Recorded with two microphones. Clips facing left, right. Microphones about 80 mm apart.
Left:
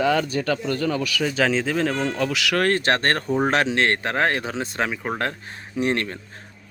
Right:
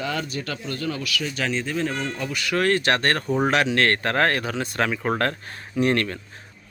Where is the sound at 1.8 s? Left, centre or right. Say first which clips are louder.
Left 5 dB; left.